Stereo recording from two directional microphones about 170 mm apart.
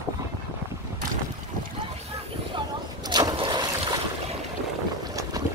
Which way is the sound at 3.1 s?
25° right (ahead or behind).